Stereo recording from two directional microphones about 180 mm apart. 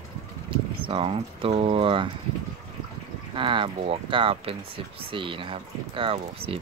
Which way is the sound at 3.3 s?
30° right (ahead or behind).